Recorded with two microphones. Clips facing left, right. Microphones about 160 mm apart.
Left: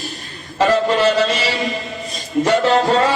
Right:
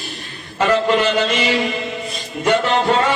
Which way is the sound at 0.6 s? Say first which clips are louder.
Left 1 dB; 35° left (ahead or behind).